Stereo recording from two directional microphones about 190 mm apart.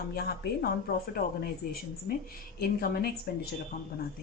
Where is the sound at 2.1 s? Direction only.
50° left (ahead or behind).